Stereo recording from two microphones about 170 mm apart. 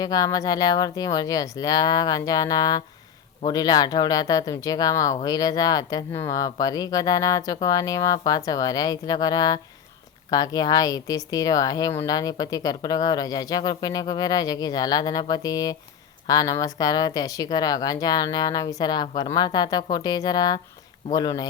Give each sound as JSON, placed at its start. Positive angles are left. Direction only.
{"t": 0.0, "sound": "speech", "side_deg": 20}